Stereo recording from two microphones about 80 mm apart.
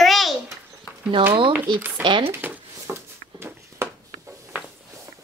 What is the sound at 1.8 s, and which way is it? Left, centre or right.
Speech, right.